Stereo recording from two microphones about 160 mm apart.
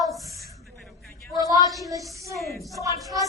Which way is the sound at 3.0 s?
20° right (ahead or behind).